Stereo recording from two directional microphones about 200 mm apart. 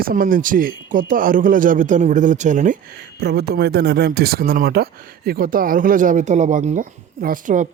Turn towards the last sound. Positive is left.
turn(degrees=-40)  # may be behind; listen again after turning